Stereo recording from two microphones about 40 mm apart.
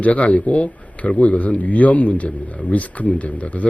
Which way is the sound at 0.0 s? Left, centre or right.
Left.